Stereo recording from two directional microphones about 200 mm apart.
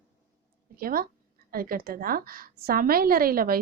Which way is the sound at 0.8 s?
45° right (ahead or behind).